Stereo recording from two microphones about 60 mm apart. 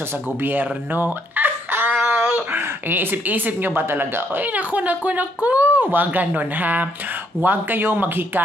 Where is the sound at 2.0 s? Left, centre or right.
Centre.